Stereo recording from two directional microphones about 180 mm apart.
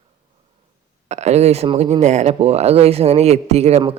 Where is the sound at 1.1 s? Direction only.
40° right (ahead or behind).